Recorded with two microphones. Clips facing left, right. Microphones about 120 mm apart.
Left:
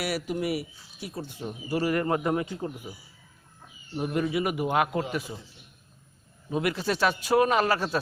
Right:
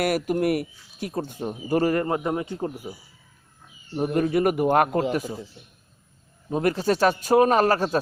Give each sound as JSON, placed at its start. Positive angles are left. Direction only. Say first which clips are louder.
{"t": 0.0, "sound": "speech", "louder": "right 7 dB", "side_deg": -50}
{"t": 1.9, "sound": "speech", "louder": "right 2 dB", "side_deg": -25}
{"t": 3.9, "sound": "speech", "louder": "right 5 dB", "side_deg": -45}
{"t": 6.5, "sound": "speech", "louder": "right 5 dB", "side_deg": -40}